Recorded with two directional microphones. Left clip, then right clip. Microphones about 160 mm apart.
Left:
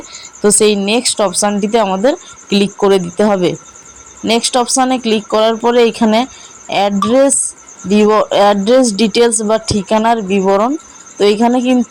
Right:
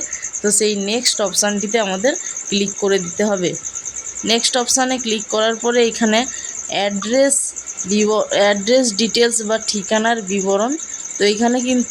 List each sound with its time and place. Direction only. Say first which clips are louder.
0.4 s speech: left 7 dB; 25° left (ahead or behind)